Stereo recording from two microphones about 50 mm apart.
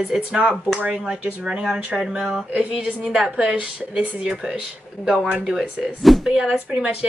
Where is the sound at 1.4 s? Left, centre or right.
Centre.